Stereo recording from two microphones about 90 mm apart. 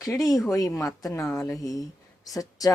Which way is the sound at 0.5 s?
40° left (ahead or behind).